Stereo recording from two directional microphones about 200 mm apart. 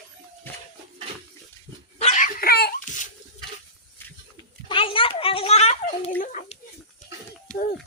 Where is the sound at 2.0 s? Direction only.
35° left (ahead or behind).